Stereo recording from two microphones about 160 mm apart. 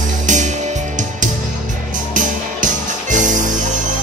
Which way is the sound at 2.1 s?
50° right (ahead or behind).